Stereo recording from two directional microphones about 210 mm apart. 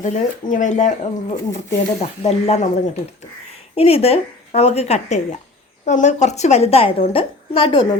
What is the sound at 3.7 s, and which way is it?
Speech, 30° left (ahead or behind).